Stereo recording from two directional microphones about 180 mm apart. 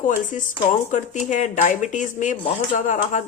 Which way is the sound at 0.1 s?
45° left (ahead or behind).